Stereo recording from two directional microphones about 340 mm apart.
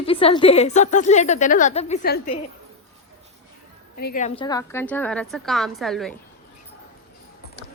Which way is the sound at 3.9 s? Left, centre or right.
Left.